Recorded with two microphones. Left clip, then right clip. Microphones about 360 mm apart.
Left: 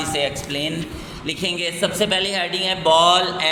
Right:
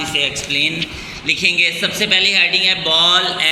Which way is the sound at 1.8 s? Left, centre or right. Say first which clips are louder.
Right 4 dB; left.